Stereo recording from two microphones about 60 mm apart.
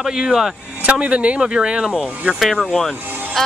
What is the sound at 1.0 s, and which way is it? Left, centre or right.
Speech, right.